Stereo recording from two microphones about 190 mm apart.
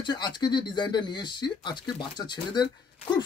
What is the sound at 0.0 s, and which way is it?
Speech, 25° left (ahead or behind).